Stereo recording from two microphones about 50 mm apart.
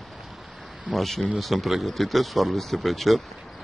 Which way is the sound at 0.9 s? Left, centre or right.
Centre.